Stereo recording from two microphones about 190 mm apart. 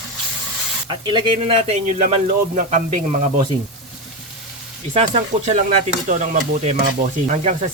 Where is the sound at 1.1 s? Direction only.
25° right (ahead or behind).